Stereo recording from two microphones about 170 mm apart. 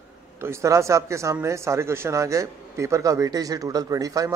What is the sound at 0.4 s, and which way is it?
A man's voice, 15° right (ahead or behind).